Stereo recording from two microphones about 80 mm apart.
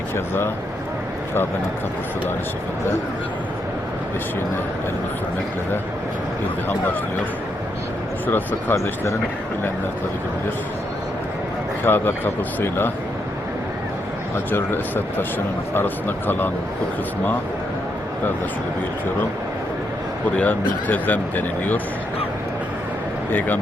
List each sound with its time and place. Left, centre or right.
8.3 s speech: left
8.7 s speech: left
11.8 s speech: left
14.5 s speech: left
20.4 s speech: left